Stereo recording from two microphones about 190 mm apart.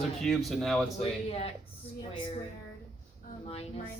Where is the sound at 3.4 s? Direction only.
30° left (ahead or behind).